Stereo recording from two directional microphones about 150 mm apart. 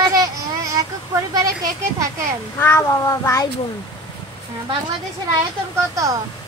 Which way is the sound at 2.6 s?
20° left (ahead or behind).